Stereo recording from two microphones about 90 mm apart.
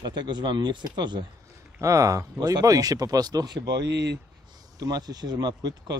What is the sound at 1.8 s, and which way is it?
Speech, 35° right (ahead or behind).